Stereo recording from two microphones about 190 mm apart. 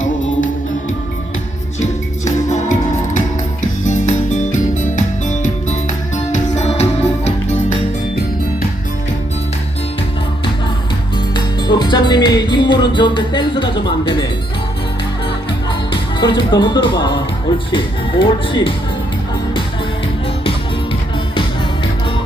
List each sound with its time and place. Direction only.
1.8 s music: 40° left (ahead or behind)
11.3 s music: 25° left (ahead or behind)
15.9 s speech: 25° left (ahead or behind)